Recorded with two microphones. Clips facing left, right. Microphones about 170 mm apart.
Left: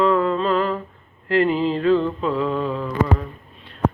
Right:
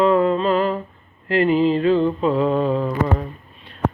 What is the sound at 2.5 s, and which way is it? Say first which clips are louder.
Mantra: right 4 dB; 45° right (ahead or behind).